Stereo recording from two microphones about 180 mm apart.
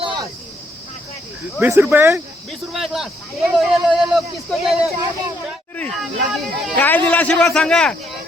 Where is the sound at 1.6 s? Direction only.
10° right (ahead or behind).